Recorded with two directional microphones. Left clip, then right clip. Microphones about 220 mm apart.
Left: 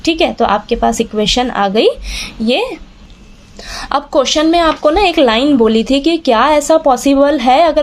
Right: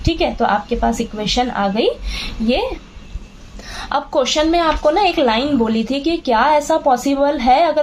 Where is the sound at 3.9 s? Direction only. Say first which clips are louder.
Left 4 dB; 35° left (ahead or behind).